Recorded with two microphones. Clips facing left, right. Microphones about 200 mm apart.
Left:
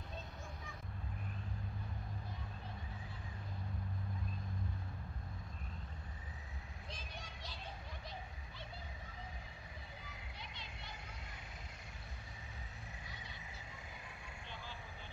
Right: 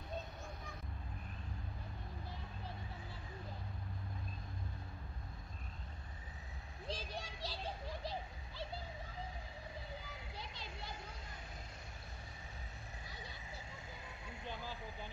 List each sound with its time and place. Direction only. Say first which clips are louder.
6.9 s children playing: right 8 dB; 35° right (ahead or behind)
10.3 s children playing: right 4 dB; 35° right (ahead or behind)